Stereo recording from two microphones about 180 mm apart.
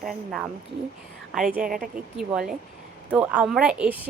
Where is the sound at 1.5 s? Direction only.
50° right (ahead or behind).